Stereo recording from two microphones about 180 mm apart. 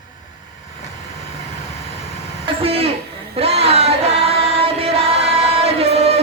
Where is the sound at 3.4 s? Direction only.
35° right (ahead or behind).